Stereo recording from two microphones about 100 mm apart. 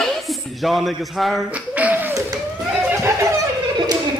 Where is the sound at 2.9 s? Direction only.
25° right (ahead or behind).